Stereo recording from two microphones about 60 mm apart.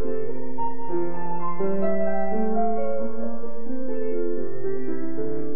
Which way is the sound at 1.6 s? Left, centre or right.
Right.